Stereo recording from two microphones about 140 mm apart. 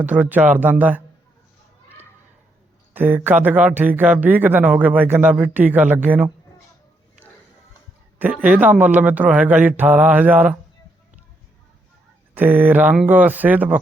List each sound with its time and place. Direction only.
0.0 s speech: 10° right (ahead or behind)
2.9 s speech: 15° right (ahead or behind)
7.2 s music: 10° right (ahead or behind)
8.2 s speech: 10° right (ahead or behind)
12.3 s speech: 15° right (ahead or behind)